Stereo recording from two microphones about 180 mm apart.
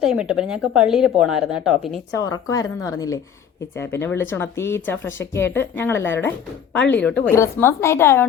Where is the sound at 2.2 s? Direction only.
20° left (ahead or behind).